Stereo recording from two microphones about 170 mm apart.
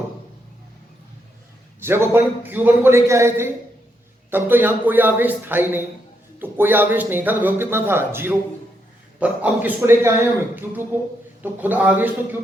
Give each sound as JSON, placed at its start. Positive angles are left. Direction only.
{"t": 1.8, "sound": "speech", "side_deg": -15}